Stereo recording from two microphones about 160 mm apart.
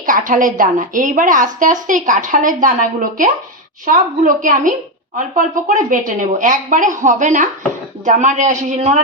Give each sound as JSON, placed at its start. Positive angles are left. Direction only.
{"t": 0.0, "sound": "a woman's voice", "side_deg": -60}